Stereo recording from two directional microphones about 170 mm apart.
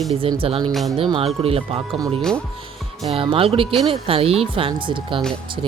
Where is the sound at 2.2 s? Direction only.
5° left (ahead or behind).